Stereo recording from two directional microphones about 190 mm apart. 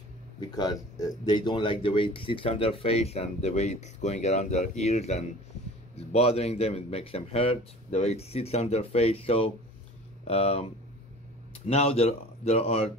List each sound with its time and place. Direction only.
0.4 s speech: 20° left (ahead or behind)